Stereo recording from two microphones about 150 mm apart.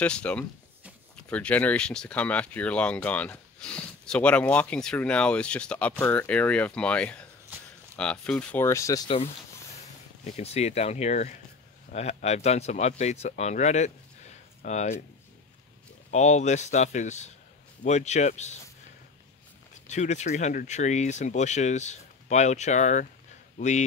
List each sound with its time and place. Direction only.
0.0 s speech: 10° left (ahead or behind)
7.5 s a sound: 15° right (ahead or behind)
7.9 s speech: 5° left (ahead or behind)
8.6 s speech: 20° left (ahead or behind)
10.3 s speech: 45° left (ahead or behind)
16.1 s speech: 50° left (ahead or behind)
19.9 s speech: 50° left (ahead or behind)